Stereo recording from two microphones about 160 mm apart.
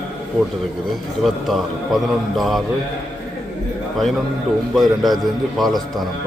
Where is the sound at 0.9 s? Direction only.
Centre (ahead or behind).